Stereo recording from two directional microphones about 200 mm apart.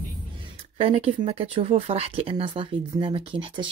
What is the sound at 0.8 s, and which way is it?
Speech, 30° right (ahead or behind).